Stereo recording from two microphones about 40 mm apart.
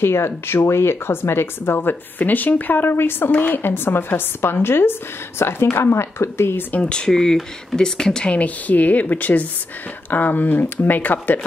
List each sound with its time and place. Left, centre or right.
0.0 s speech: left
3.3 s a woman's voice: left
3.5 s speech: left
5.4 s speech: left
6.8 s speech: left
7.1 s speech: centre
8.4 s a woman's voice: left